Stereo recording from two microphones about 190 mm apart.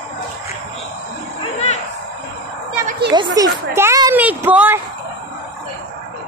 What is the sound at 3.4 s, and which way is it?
A woman's voice, 20° right (ahead or behind).